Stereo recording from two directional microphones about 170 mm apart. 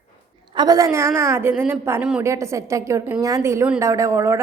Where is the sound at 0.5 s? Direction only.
20° right (ahead or behind).